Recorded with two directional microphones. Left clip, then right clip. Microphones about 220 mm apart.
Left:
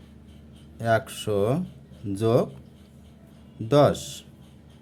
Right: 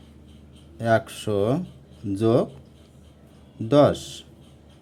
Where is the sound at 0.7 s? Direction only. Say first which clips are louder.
Right 2 dB; 10° right (ahead or behind).